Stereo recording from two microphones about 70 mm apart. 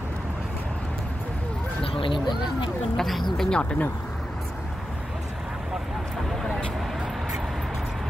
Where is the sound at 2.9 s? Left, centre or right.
Centre.